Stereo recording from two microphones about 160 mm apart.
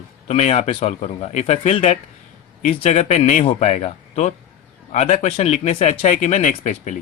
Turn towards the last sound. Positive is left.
turn(degrees=50)  # may be behind; listen again after turning